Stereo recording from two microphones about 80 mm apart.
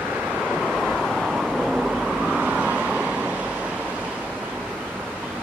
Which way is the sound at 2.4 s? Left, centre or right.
Centre.